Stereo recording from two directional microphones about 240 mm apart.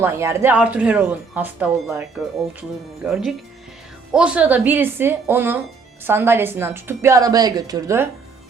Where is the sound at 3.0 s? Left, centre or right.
Centre.